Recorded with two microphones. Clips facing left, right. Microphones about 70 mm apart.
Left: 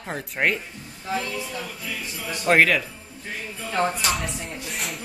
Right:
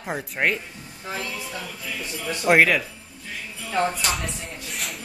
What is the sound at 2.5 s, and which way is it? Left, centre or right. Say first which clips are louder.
Speech: right 1 dB; centre.